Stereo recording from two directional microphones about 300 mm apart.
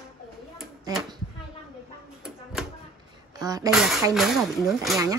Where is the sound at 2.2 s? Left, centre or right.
Centre.